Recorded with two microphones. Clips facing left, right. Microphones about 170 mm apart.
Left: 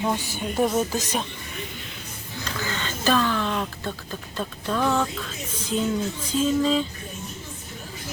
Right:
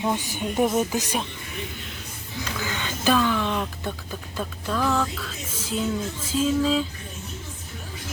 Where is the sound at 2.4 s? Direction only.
10° right (ahead or behind).